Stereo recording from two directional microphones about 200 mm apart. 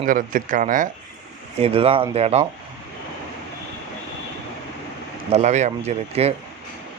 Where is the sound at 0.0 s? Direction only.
40° right (ahead or behind).